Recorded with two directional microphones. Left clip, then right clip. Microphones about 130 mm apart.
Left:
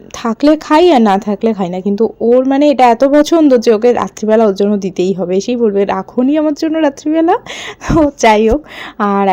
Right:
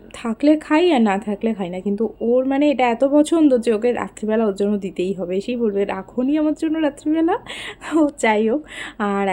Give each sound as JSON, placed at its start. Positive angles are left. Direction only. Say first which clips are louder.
{"t": 0.2, "sound": "speech", "louder": "left 6 dB", "side_deg": 35}